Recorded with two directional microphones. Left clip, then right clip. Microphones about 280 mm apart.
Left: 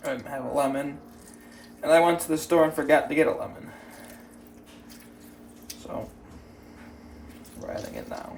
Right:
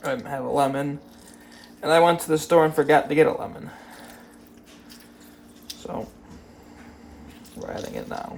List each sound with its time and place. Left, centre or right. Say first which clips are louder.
0.0 s speech: right 4 dB; right
7.7 s speech: right 2 dB; right